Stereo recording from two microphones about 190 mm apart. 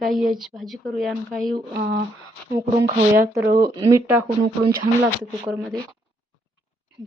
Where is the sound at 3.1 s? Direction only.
50° right (ahead or behind).